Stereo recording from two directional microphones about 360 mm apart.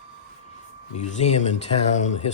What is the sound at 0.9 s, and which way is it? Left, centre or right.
Speech, centre.